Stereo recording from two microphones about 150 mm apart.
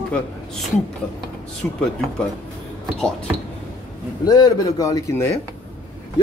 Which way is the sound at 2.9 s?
5° left (ahead or behind).